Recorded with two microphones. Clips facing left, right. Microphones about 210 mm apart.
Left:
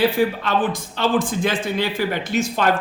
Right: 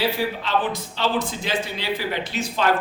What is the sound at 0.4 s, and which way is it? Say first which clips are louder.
A man's voice: left 3 dB; 50° left (ahead or behind).